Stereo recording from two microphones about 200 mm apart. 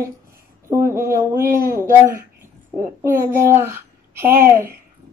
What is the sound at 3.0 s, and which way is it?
Speech, 10° right (ahead or behind).